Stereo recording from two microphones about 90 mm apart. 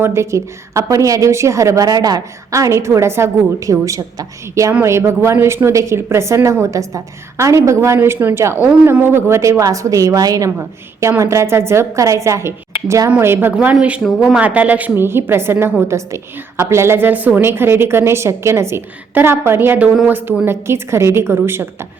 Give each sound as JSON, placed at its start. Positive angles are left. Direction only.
{"t": 0.0, "sound": "a woman's voice", "side_deg": -30}
{"t": 11.2, "sound": "a woman's voice", "side_deg": -30}
{"t": 14.0, "sound": "speech", "side_deg": 0}
{"t": 14.3, "sound": "a woman's voice", "side_deg": -15}